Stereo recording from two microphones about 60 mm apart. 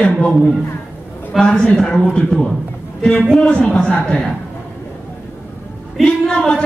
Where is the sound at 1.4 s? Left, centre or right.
Centre.